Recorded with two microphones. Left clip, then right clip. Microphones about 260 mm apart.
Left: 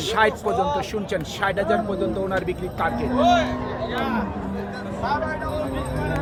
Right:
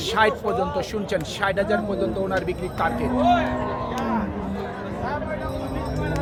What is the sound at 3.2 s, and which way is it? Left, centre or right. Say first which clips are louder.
Speech: left 2 dB; left.